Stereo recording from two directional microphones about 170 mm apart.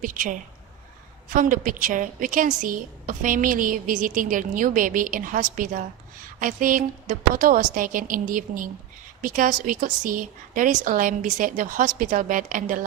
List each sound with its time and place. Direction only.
0.0 s a woman's voice: 50° right (ahead or behind)